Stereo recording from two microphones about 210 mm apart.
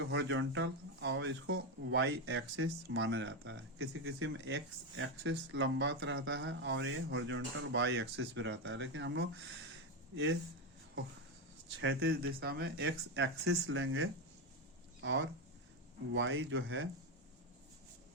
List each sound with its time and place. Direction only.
0.1 s speech: 60° right (ahead or behind)
11.8 s speech: 55° right (ahead or behind)